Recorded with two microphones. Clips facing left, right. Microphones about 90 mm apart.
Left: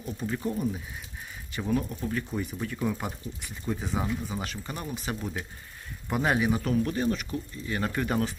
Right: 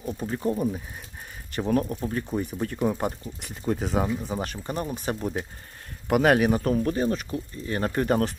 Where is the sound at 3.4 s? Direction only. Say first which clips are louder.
Right 6 dB; 60° right (ahead or behind).